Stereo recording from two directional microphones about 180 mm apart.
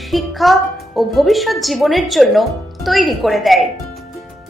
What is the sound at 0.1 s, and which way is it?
A woman's voice, centre (ahead or behind).